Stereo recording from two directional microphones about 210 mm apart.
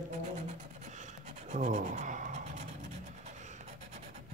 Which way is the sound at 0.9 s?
35° right (ahead or behind).